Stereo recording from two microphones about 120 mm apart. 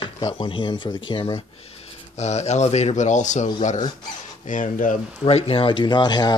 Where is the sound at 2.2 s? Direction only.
70° left (ahead or behind); by 3.5 s 90° left.